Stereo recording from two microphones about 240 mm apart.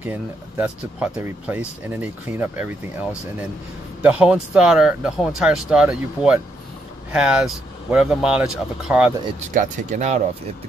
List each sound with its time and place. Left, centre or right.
0.0 s speech: centre
4.0 s speech: centre
9.5 s speech: right